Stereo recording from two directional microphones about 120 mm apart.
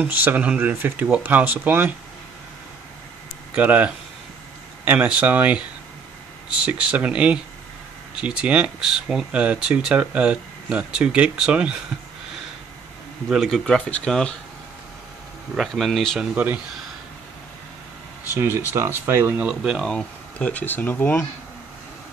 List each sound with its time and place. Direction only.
0.0 s speech: 15° right (ahead or behind)
3.5 s speech: 15° right (ahead or behind)
13.3 s speech: centre (ahead or behind)
15.5 s speech: centre (ahead or behind)
18.3 s speech: 20° right (ahead or behind)
19.9 s speech: 10° left (ahead or behind)